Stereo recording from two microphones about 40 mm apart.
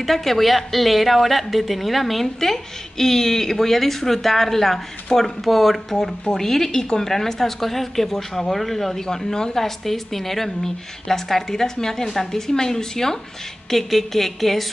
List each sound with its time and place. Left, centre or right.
0.0 s a woman's voice: centre
9.0 s speech: centre
9.8 s a woman's voice: centre